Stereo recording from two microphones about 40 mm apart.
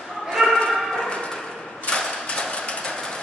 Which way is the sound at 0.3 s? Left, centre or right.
Centre.